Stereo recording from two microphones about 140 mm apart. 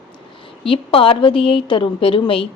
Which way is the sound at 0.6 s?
40° left (ahead or behind).